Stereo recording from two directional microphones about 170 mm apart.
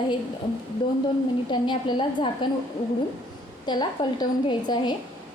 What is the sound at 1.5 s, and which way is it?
Speech, 25° left (ahead or behind).